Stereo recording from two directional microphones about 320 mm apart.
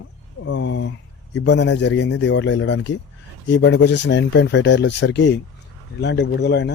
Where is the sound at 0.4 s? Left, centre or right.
Left.